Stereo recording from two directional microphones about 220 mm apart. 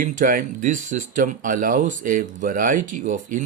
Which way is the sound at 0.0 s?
40° right (ahead or behind).